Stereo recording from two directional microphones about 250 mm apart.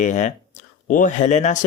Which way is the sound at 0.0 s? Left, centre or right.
Left.